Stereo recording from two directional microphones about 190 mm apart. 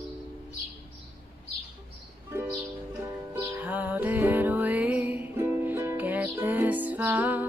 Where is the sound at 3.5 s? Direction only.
10° right (ahead or behind).